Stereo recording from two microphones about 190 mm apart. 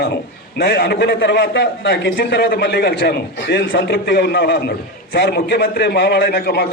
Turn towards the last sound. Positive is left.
turn(degrees=55)  # may be behind; listen again after turning